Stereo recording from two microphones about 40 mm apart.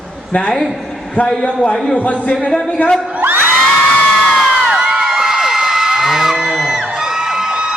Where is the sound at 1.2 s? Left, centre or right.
Left.